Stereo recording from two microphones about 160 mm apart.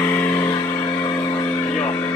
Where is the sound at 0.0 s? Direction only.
15° left (ahead or behind).